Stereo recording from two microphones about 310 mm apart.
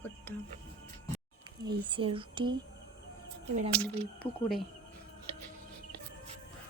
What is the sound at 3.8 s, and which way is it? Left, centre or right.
Speech, centre.